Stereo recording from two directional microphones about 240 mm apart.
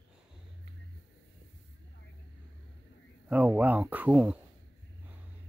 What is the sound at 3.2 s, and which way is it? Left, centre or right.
Speech, centre.